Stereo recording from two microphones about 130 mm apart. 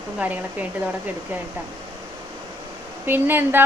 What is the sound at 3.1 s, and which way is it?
Speech, 15° right (ahead or behind).